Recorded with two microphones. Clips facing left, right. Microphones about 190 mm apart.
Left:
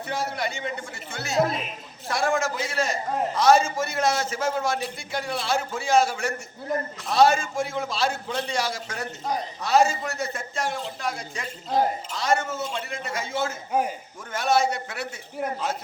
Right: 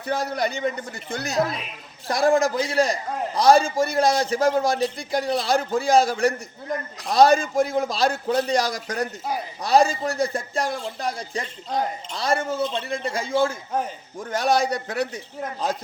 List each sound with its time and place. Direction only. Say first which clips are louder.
0.0 s a man's voice: right 4 dB; 35° right (ahead or behind)
2.0 s a man's voice: right 6 dB; 35° right (ahead or behind)
6.7 s a woman's voice: left 1 dB; 5° left (ahead or behind)
7.1 s a man's voice: right 3 dB; 35° right (ahead or behind)
11.7 s a woman's voice: left 3 dB; centre (ahead or behind)
12.1 s a man's voice: right 5 dB; 35° right (ahead or behind)